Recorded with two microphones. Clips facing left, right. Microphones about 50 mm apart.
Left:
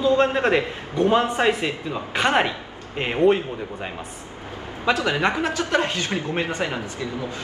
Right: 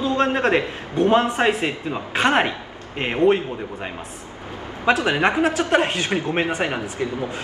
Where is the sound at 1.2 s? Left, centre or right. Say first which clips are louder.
Right 1 dB; right.